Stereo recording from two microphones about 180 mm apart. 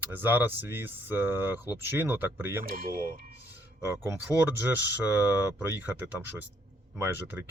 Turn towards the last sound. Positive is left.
turn(degrees=-10)  # may be behind; listen again after turning